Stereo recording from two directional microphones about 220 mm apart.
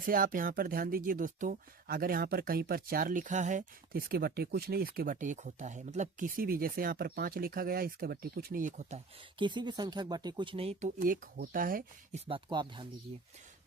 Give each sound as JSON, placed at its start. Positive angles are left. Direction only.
{"t": 0.0, "sound": "speech", "side_deg": -40}
{"t": 9.4, "sound": "speech", "side_deg": -20}
{"t": 12.2, "sound": "speech", "side_deg": -20}